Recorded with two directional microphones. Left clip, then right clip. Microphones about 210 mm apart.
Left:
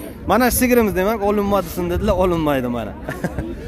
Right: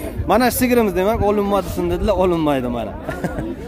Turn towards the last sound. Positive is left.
turn(degrees=5)  # may be behind; listen again after turning